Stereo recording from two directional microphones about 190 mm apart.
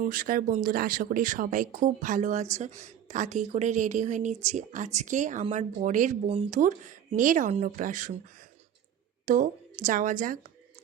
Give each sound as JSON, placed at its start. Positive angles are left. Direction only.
{"t": 0.0, "sound": "speech", "side_deg": -45}
{"t": 6.2, "sound": "speech", "side_deg": -30}
{"t": 6.6, "sound": "a woman's voice", "side_deg": -40}